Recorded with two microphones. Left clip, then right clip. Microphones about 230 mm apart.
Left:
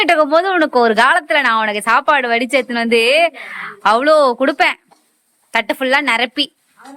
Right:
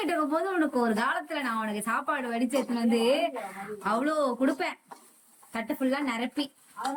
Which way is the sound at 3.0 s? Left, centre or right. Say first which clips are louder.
Left 13 dB; left.